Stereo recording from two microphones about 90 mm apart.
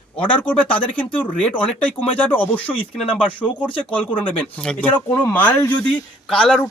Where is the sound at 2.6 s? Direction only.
90° left.